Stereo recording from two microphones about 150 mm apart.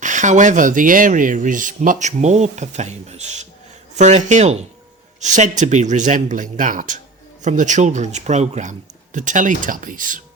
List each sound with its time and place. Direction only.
0.0 s speech: 55° right (ahead or behind)